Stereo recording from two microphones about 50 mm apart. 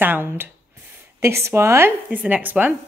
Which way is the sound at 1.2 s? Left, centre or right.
Right.